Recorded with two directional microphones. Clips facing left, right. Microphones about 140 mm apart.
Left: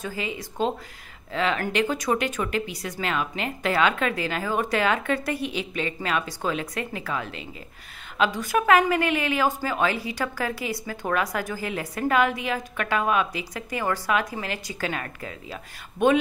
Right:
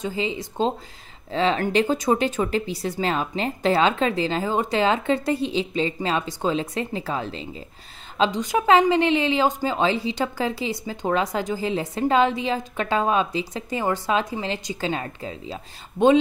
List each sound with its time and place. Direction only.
0.0 s speech: 25° right (ahead or behind)